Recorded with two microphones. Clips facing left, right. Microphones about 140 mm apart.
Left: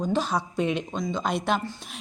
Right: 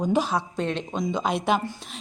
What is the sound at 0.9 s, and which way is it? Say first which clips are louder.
Speech: right 2 dB; centre (ahead or behind).